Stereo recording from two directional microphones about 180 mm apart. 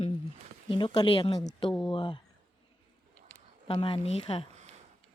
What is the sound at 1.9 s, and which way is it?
Speech, 25° left (ahead or behind).